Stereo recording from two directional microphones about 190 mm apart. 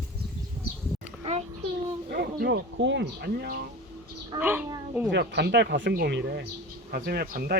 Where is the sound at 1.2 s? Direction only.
35° right (ahead or behind).